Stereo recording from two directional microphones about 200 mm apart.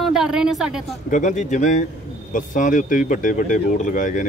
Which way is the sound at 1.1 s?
40° left (ahead or behind).